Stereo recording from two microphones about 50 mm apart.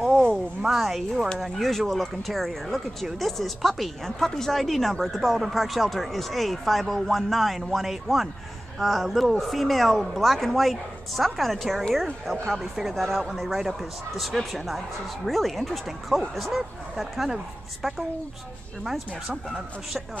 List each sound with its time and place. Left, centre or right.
0.7 s speech: centre